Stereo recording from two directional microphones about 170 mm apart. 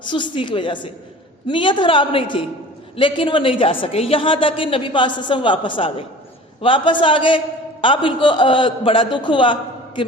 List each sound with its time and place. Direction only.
0.0 s a man's voice: 30° left (ahead or behind)